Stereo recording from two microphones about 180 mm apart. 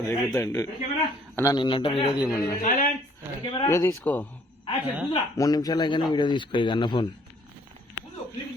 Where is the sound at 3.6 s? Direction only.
15° left (ahead or behind).